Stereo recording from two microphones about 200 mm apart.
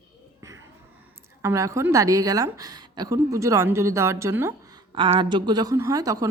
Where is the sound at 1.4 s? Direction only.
15° right (ahead or behind).